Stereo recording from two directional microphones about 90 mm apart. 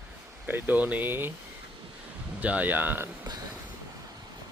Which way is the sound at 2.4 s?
15° right (ahead or behind).